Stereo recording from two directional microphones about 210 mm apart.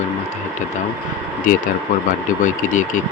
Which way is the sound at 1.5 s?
40° left (ahead or behind).